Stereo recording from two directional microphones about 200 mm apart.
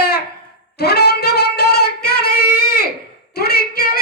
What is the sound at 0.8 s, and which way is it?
Music, 55° left (ahead or behind).